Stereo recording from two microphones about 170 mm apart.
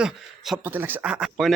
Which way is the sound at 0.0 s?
5° right (ahead or behind).